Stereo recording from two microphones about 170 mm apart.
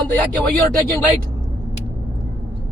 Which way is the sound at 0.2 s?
5° left (ahead or behind).